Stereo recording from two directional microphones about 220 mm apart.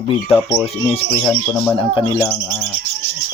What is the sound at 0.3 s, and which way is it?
Speech, centre (ahead or behind).